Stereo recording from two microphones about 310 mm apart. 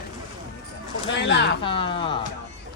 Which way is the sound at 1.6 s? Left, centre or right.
Centre.